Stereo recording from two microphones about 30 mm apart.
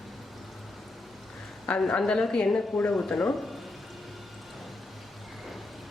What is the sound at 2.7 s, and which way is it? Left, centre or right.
Speech, centre.